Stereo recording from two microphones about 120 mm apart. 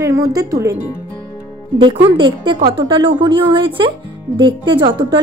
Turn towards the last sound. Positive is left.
turn(degrees=-40)  # may be behind; listen again after turning